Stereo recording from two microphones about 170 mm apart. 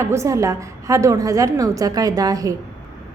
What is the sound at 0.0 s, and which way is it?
A woman's voice, 15° right (ahead or behind).